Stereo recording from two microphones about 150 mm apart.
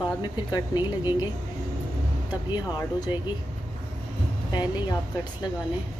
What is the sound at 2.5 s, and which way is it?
Speech, 30° left (ahead or behind).